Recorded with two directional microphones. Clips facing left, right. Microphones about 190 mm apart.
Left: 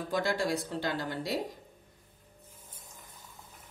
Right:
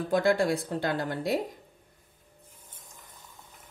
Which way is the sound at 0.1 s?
55° right (ahead or behind).